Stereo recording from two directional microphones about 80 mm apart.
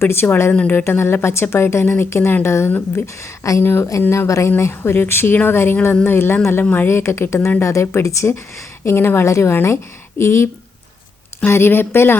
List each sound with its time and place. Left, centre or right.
0.0 s speech: left
0.5 s speech: centre
0.9 s speech: left